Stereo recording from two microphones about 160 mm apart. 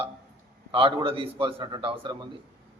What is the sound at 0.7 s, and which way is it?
A man's voice, 35° right (ahead or behind).